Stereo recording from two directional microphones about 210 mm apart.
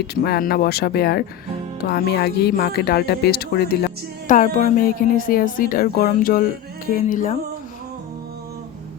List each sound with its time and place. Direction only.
0.0 s speech: 50° left (ahead or behind)